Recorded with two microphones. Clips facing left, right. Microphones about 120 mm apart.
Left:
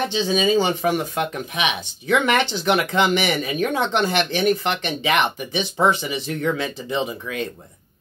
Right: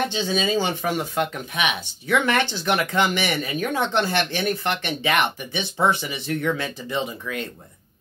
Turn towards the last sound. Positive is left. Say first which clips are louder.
# left 2 dB
turn(degrees=20)  # may be behind; listen again after turning